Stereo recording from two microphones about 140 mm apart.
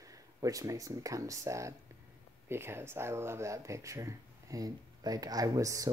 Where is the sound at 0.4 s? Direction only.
25° right (ahead or behind).